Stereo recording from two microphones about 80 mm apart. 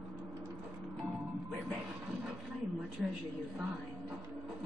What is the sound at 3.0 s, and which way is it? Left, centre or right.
Speech, centre.